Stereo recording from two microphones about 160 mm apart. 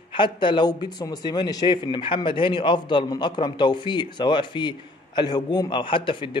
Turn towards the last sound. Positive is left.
turn(degrees=30)  # may be behind; listen again after turning